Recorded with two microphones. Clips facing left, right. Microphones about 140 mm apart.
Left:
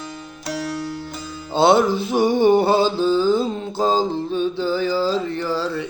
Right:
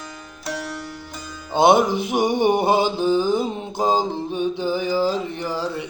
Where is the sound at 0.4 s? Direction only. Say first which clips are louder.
Left 3 dB; centre (ahead or behind).